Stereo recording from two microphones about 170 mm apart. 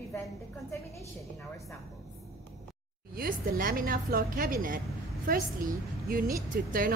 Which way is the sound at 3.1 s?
60° right (ahead or behind).